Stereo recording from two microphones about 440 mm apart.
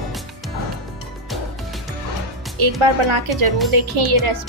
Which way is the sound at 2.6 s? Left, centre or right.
Right.